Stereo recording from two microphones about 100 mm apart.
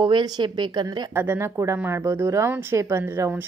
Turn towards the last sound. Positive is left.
turn(degrees=-25)  # may be behind; listen again after turning